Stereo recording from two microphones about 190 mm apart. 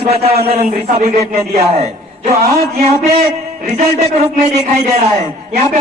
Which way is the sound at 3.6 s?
35° right (ahead or behind).